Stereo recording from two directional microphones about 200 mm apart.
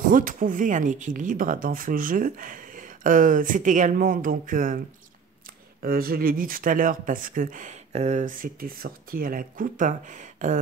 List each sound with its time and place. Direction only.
0.1 s speech: 40° right (ahead or behind)